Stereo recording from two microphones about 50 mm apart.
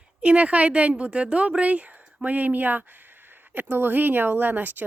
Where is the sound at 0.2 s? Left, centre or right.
Right.